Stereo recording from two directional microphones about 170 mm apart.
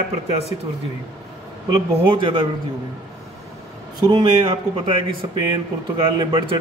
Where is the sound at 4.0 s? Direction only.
30° right (ahead or behind).